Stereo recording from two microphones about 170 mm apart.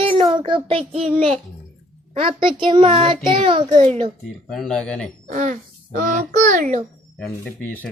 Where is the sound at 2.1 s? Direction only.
30° right (ahead or behind).